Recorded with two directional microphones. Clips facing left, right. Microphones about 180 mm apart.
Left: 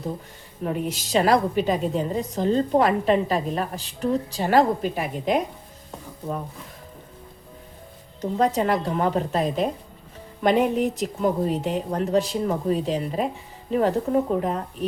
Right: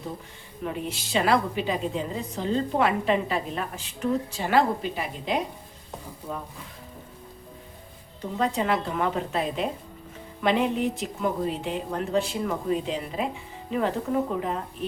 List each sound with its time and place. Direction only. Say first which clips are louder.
0.6 s a woman's voice: left 4 dB; 40° left (ahead or behind)
8.2 s a woman's voice: left 5 dB; 40° left (ahead or behind)